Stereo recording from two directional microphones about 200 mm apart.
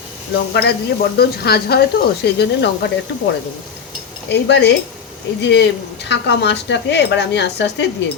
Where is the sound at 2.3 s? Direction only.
55° left (ahead or behind).